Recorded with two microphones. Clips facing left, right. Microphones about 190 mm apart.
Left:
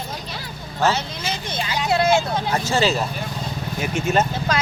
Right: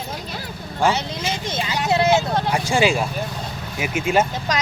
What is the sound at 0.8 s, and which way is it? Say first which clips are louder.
Speech: right 1 dB; 20° right (ahead or behind).